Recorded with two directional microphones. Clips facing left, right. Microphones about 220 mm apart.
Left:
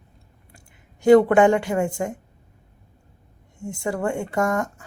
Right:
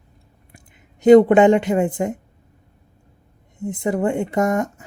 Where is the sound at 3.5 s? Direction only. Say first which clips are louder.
Right 5 dB; 20° right (ahead or behind).